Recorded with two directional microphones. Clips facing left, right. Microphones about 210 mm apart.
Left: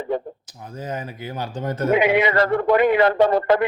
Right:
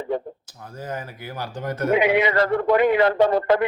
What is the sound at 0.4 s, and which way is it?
Speech, 20° left (ahead or behind).